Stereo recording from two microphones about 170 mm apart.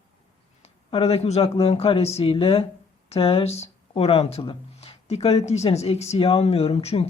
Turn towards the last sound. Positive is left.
turn(degrees=35)  # may be behind; listen again after turning